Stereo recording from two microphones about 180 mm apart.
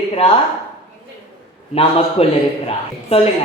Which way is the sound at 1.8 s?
35° left (ahead or behind).